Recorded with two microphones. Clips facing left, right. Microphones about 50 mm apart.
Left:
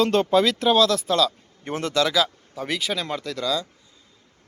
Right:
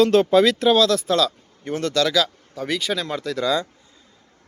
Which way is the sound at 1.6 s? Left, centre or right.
Left.